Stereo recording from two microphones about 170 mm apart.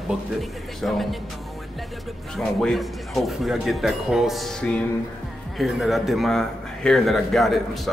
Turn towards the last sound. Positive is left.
turn(degrees=0)  # may be behind; listen again after turning